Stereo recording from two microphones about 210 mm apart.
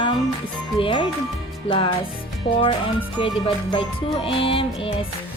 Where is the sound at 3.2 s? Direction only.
25° left (ahead or behind).